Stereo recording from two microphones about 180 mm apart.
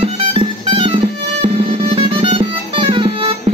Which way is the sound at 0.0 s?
35° right (ahead or behind).